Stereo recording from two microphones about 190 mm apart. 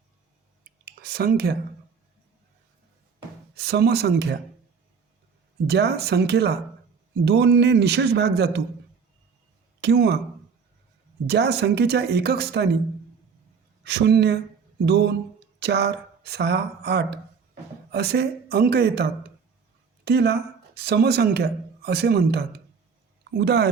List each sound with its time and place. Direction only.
0.6 s a sound: 50° right (ahead or behind)
3.5 s speech: 60° right (ahead or behind)
5.6 s speech: 60° right (ahead or behind)
9.8 s speech: 60° right (ahead or behind)
11.3 s speech: 60° right (ahead or behind)
13.8 s speech: 60° right (ahead or behind)
20.1 s speech: 60° right (ahead or behind)